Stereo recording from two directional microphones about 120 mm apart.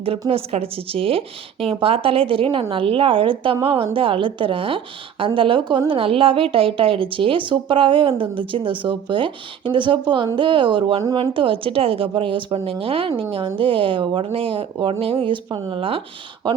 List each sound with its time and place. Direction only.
0.0 s a woman's voice: 50° right (ahead or behind)